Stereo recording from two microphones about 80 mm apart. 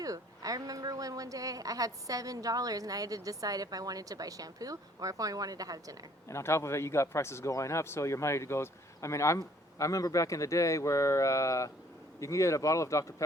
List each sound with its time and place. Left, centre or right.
0.0 s a woman's voice: right
6.2 s speech: left